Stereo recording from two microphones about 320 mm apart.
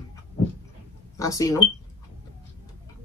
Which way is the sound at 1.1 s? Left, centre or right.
Centre.